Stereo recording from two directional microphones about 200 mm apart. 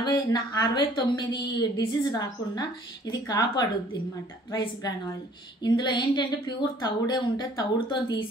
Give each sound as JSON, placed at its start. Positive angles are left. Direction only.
{"t": 0.0, "sound": "a woman's voice", "side_deg": 20}